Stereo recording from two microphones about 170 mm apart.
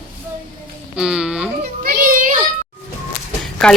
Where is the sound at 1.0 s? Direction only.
5° right (ahead or behind).